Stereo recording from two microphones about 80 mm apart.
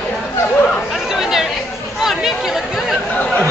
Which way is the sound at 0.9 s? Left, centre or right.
Centre.